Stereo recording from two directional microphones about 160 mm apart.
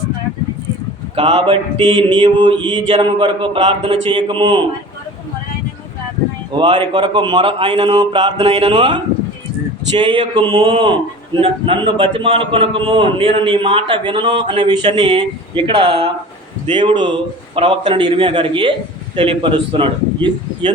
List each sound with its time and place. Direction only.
1.1 s a man's voice: 40° right (ahead or behind)
6.6 s a man's voice: 30° right (ahead or behind)
8.4 s a man's voice: 40° right (ahead or behind)
10.0 s a man's voice: 30° right (ahead or behind)